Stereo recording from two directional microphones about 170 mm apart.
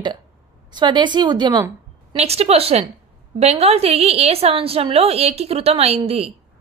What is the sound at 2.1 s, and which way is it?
A woman's voice, 40° right (ahead or behind).